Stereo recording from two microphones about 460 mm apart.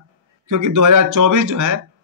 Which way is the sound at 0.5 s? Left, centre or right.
Right.